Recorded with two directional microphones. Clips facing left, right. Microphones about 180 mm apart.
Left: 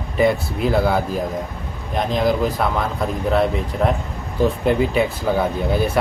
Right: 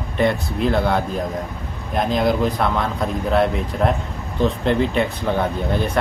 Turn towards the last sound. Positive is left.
turn(degrees=5)  # may be behind; listen again after turning